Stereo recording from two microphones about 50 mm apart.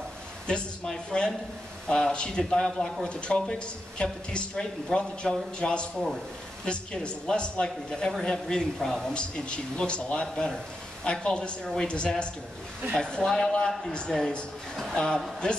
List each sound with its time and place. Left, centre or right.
0.5 s speech: centre
9.1 s speech: left
15.0 s speech: centre